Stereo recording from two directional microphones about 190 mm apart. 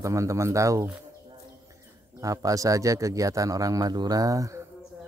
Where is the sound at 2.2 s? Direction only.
20° right (ahead or behind).